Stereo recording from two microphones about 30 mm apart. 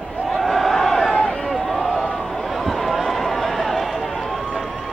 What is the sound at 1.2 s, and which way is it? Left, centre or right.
Run, centre.